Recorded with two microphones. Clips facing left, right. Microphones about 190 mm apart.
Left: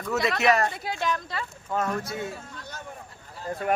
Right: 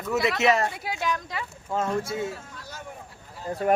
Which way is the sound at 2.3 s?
5° right (ahead or behind).